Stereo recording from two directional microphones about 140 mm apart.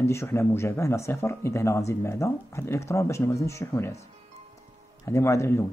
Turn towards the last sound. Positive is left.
turn(degrees=20)  # may be behind; listen again after turning